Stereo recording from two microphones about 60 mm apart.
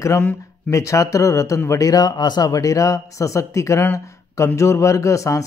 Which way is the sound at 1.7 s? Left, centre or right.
Left.